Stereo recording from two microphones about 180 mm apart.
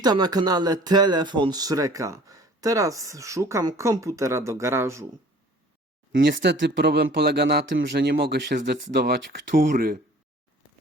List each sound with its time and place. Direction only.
0.0 s speech: 20° right (ahead or behind)
6.1 s speech: 70° right (ahead or behind)